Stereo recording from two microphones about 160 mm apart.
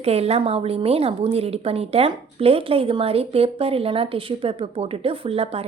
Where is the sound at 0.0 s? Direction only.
40° right (ahead or behind).